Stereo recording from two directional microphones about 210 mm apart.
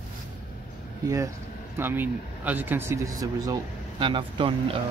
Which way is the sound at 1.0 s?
15° right (ahead or behind).